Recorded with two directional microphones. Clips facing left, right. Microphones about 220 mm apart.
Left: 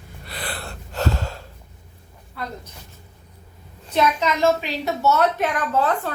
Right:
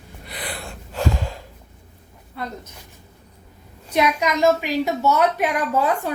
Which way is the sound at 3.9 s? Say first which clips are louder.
Even; 10° right (ahead or behind).